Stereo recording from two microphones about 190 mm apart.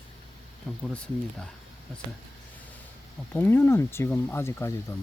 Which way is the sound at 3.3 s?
10° left (ahead or behind).